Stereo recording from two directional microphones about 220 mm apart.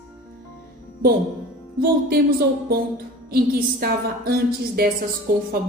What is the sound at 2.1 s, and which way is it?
A woman's voice, 45° right (ahead or behind).